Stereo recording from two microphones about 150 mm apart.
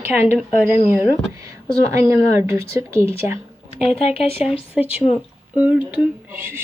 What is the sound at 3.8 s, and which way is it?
Speech, 40° left (ahead or behind).